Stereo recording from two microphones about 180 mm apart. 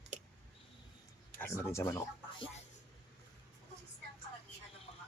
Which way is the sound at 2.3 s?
30° left (ahead or behind).